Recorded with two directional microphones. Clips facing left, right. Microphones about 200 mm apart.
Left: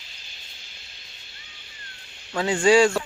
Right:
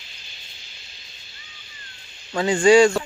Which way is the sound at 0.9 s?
60° left (ahead or behind).